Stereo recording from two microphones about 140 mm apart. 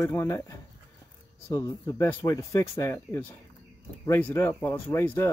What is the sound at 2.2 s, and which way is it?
Speech, 25° left (ahead or behind).